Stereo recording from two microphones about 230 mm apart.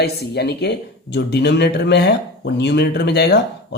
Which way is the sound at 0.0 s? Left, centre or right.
Left.